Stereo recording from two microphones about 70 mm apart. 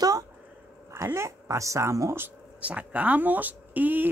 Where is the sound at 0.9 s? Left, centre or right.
Right.